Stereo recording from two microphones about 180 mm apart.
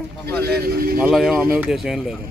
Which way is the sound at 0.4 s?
60° right (ahead or behind).